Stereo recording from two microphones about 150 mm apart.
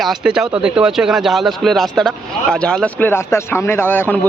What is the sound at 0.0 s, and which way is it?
Speech, 5° right (ahead or behind).